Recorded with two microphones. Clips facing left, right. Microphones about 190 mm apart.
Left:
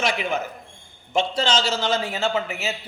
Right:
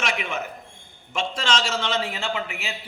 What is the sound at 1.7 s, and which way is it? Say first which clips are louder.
Speech: left 2 dB; 35° left (ahead or behind).